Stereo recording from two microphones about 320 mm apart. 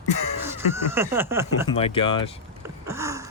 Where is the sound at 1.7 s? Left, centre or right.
Centre.